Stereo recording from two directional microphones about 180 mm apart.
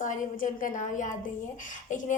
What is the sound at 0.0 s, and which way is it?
A woman's voice, 45° left (ahead or behind).